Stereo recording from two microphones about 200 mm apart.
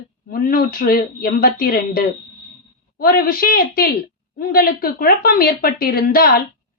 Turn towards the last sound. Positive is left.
turn(degrees=50)  # may be behind; listen again after turning